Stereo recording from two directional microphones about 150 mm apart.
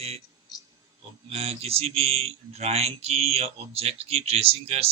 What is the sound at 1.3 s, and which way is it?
Speech, 40° right (ahead or behind).